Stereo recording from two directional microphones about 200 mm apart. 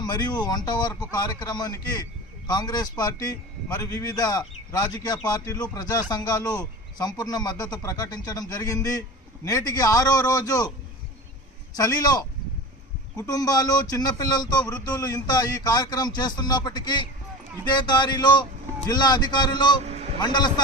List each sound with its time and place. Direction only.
0.0 s a man's voice: 20° left (ahead or behind)
11.7 s a man's voice: 20° left (ahead or behind)